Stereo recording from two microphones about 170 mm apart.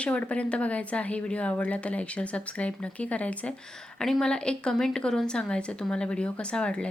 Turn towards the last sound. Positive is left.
turn(degrees=5)  # may be behind; listen again after turning